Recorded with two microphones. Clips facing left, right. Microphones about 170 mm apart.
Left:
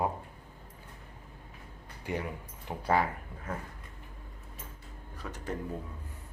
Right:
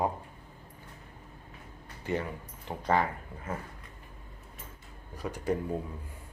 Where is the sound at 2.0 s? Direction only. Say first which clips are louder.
Right 3 dB; 15° left (ahead or behind).